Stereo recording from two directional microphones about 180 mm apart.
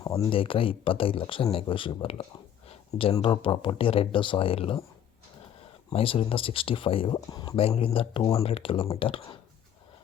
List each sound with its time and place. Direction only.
0.0 s a sound: 15° left (ahead or behind)
0.3 s speech: 30° left (ahead or behind)
5.9 s speech: 30° left (ahead or behind)
8.4 s speech: 30° left (ahead or behind)